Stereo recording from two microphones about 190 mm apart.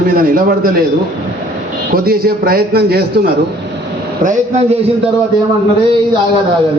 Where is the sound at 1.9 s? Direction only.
50° right (ahead or behind).